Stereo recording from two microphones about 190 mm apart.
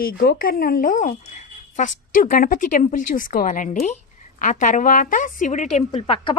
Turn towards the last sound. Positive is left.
turn(degrees=30)  # may be behind; listen again after turning